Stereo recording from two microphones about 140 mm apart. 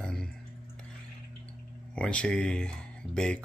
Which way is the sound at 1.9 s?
10° left (ahead or behind).